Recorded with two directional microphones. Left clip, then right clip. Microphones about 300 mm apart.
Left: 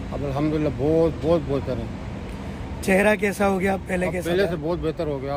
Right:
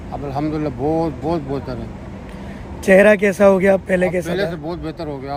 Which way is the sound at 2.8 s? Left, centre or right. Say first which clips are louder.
Right 8 dB; right.